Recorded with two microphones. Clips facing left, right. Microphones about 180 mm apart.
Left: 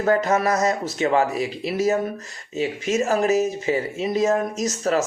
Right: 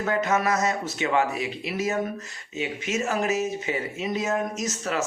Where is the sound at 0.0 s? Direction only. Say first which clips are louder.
Left 5 dB; 35° left (ahead or behind).